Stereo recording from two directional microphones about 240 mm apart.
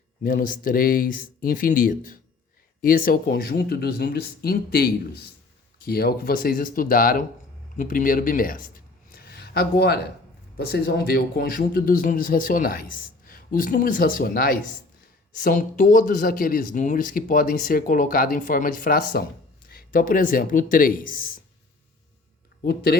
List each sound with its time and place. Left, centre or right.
0.2 s speech: left
22.6 s speech: left